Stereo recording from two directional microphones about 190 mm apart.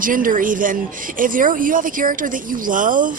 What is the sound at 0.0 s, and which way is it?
A woman's voice, 45° right (ahead or behind).